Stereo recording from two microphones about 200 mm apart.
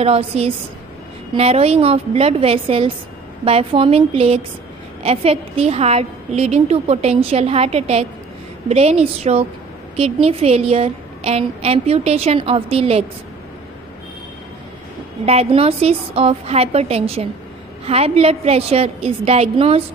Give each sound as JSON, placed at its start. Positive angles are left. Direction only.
{"t": 0.0, "sound": "a woman's voice", "side_deg": -30}
{"t": 15.2, "sound": "a woman's voice", "side_deg": -30}